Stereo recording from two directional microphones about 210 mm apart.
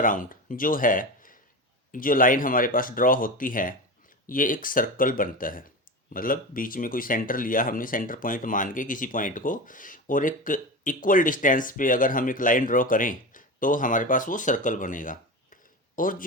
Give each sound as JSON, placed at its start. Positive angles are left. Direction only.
{"t": 0.0, "sound": "speech", "side_deg": 40}